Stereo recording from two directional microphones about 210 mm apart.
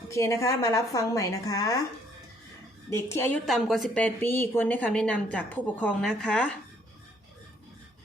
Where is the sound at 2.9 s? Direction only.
10° left (ahead or behind).